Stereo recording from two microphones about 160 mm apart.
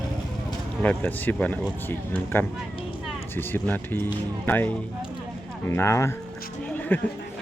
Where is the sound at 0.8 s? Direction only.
10° left (ahead or behind).